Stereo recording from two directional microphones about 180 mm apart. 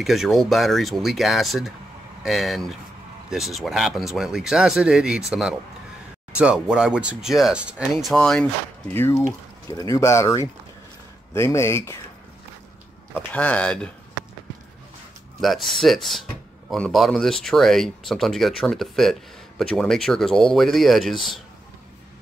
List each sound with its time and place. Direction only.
0.0 s speech: centre (ahead or behind); by 12.0 s 15° left (ahead or behind)
13.1 s speech: 10° left (ahead or behind)
15.4 s speech: centre (ahead or behind)